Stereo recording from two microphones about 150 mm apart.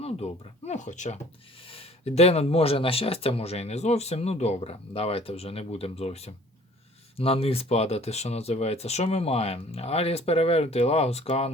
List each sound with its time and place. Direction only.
0.0 s speech: 45° left (ahead or behind)
1.6 s speech: 40° left (ahead or behind)